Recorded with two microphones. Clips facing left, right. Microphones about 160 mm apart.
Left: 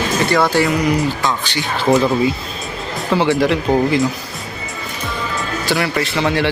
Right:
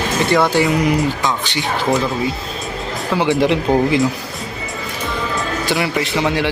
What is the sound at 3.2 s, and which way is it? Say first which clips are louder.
Speech: right 1 dB; 20° right (ahead or behind).